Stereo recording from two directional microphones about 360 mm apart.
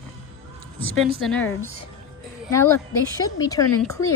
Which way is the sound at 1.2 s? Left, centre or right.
Centre.